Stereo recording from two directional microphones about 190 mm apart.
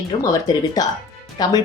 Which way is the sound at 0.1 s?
25° left (ahead or behind).